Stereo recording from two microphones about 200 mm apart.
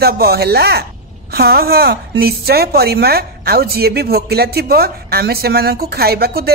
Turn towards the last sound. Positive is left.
turn(degrees=-50)  # may be behind; listen again after turning